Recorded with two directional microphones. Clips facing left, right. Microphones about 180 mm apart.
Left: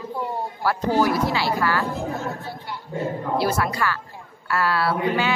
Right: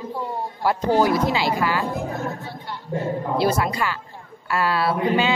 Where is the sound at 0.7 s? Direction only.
20° right (ahead or behind).